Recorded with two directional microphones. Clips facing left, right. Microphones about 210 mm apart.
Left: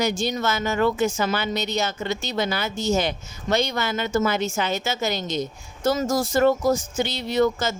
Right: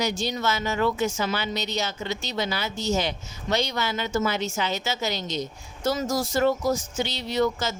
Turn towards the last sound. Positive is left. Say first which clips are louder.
# left 3 dB
turn(degrees=50)  # may be behind; listen again after turning